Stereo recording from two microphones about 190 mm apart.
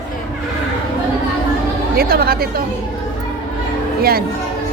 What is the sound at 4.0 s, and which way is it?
Speech, 55° right (ahead or behind).